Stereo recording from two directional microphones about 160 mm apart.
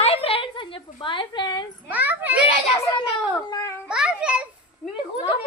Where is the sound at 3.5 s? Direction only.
20° left (ahead or behind).